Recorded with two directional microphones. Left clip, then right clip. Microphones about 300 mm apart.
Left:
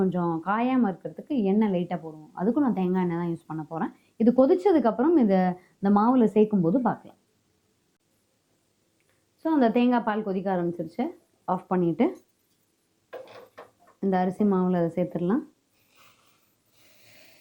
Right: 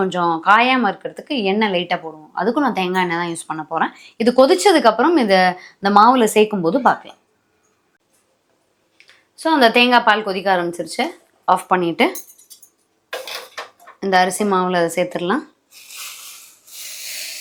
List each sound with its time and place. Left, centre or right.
0.0 s speech: centre
2.0 s a woman's voice: centre
2.4 s speech: centre
9.0 s a woman's voice: centre
13.1 s dishes: centre